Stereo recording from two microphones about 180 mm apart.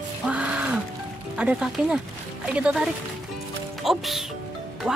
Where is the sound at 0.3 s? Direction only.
5° right (ahead or behind).